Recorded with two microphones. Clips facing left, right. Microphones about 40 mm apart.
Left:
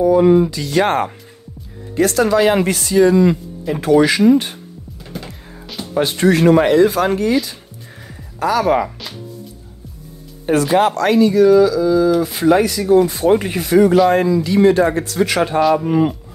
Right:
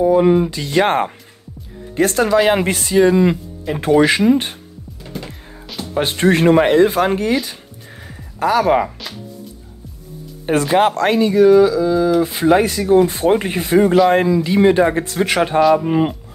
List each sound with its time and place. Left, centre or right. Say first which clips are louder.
0.0 s speech: left 1 dB; right
2.2 s speech: right 1 dB; centre
2.5 s speech: even; right
5.1 s music: right 1 dB; centre
5.9 s speech: left 1 dB; right
8.4 s speech: right 1 dB; right
10.4 s speech: even; right
14.1 s speech: even; right